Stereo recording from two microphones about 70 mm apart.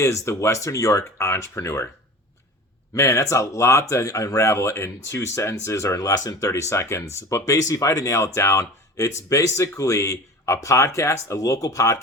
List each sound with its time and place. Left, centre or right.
0.0 s speech: left
2.9 s speech: left